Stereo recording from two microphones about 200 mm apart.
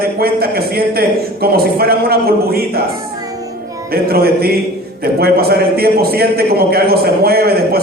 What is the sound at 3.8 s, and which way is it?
A man's voice, 50° right (ahead or behind).